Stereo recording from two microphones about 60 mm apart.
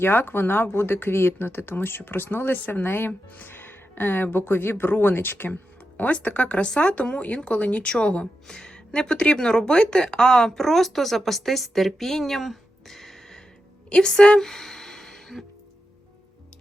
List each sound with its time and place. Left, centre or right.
0.0 s speech: left
6.0 s speech: left; by 13.4 s centre
13.9 s a sound: centre